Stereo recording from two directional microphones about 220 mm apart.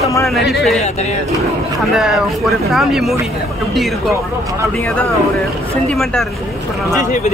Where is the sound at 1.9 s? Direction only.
Centre (ahead or behind).